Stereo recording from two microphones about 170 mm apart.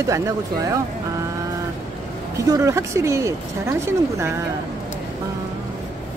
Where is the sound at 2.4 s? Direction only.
20° right (ahead or behind).